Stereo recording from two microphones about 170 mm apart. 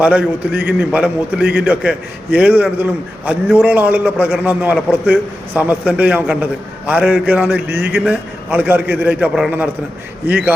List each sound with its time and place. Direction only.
0.0 s a man's voice: 5° right (ahead or behind)
7.8 s a man's voice: 65° right (ahead or behind)
8.0 s a man's voice: 10° right (ahead or behind)